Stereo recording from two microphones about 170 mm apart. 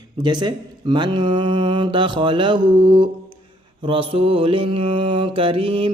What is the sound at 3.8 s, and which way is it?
Mantra, 30° right (ahead or behind).